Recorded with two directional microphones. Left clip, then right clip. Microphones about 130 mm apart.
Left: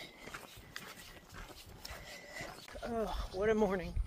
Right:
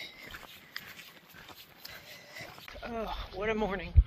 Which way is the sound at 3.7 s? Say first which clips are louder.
Right 1 dB; 15° left (ahead or behind).